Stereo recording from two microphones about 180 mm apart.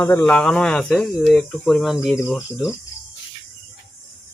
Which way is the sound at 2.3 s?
10° left (ahead or behind).